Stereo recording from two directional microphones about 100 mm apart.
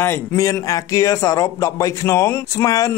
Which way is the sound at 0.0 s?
25° left (ahead or behind).